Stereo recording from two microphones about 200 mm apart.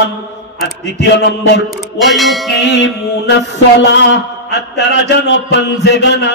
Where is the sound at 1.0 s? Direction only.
60° left (ahead or behind).